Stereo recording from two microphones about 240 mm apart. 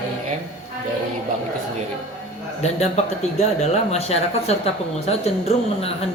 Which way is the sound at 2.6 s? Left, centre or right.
Left.